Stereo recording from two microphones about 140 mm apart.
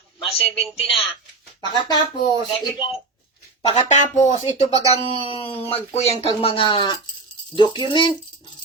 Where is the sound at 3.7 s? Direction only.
55° left (ahead or behind).